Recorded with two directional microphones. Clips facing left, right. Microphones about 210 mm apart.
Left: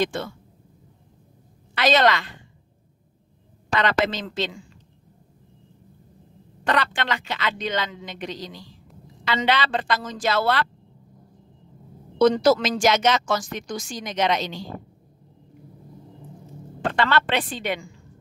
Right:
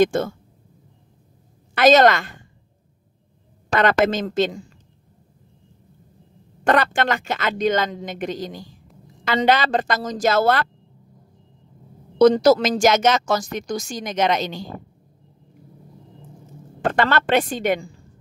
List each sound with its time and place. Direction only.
0.0 s speech: 45° right (ahead or behind)
1.8 s speech: 45° right (ahead or behind)
3.7 s speech: 50° right (ahead or behind)
6.6 s speech: 50° right (ahead or behind)
12.2 s speech: 40° right (ahead or behind)
16.9 s speech: 45° right (ahead or behind)